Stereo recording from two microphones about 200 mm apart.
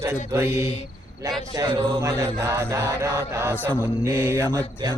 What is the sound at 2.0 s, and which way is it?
Mantra, 15° right (ahead or behind).